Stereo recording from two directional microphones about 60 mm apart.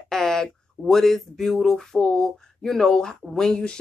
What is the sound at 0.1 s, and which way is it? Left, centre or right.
Speech, centre.